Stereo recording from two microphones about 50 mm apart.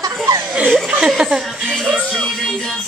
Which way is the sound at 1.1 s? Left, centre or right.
Centre.